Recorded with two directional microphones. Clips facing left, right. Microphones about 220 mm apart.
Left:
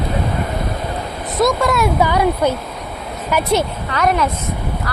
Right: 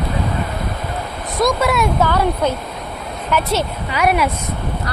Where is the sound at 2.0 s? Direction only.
10° left (ahead or behind).